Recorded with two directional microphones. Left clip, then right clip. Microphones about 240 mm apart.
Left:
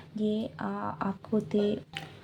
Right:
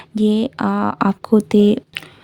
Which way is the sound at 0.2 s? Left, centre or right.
Right.